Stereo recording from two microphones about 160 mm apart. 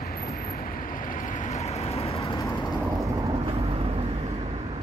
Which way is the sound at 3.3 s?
35° right (ahead or behind).